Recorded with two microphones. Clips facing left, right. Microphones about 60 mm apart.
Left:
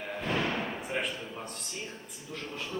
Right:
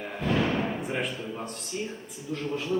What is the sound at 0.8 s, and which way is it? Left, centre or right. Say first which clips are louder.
A man's voice: right 3 dB; centre.